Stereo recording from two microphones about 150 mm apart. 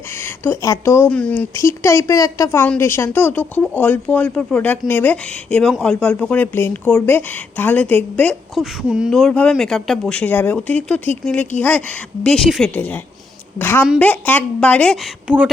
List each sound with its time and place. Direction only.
0.2 s a woman's voice: 15° left (ahead or behind)